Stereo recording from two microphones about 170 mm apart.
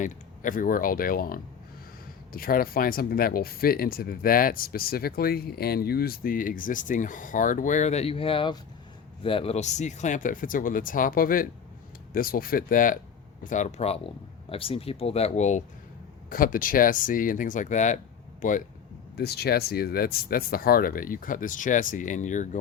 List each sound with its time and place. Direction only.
0.0 s speech: 50° left (ahead or behind)
16.3 s speech: 55° left (ahead or behind)
19.1 s speech: 70° left (ahead or behind); by 22.4 s 45° left (ahead or behind)